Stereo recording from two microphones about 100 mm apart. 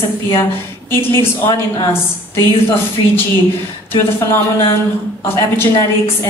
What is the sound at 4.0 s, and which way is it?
A woman's voice, 25° left (ahead or behind).